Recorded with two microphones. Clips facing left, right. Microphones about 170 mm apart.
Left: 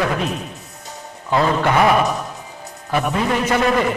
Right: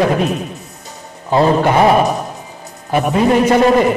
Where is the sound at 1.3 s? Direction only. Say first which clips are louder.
Right 5 dB; 30° right (ahead or behind).